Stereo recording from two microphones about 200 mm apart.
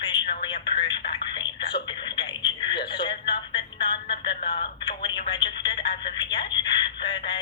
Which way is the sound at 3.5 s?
25° left (ahead or behind).